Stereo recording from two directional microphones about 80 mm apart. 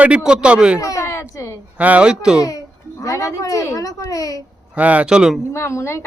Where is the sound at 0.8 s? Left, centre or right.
Left.